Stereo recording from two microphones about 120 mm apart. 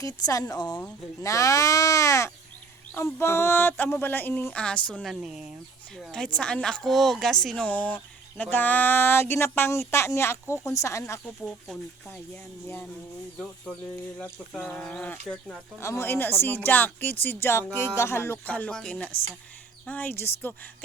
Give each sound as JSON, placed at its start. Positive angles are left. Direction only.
{"t": 0.0, "sound": "speech", "side_deg": 30}
{"t": 5.2, "sound": "speech", "side_deg": -5}
{"t": 6.0, "sound": "speech", "side_deg": 5}
{"t": 12.0, "sound": "speech", "side_deg": 10}
{"t": 14.2, "sound": "speech", "side_deg": 10}
{"t": 15.8, "sound": "speech", "side_deg": 20}